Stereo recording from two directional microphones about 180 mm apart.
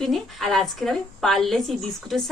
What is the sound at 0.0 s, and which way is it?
A woman's voice, centre (ahead or behind).